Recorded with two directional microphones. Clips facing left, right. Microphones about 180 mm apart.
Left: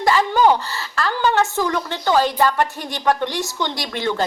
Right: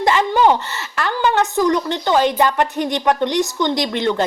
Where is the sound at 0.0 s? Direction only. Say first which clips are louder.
Right 1 dB; 20° right (ahead or behind).